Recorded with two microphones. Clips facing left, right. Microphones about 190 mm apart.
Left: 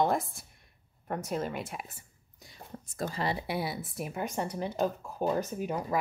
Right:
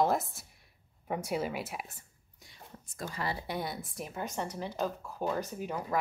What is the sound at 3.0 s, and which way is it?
Speech, 25° left (ahead or behind).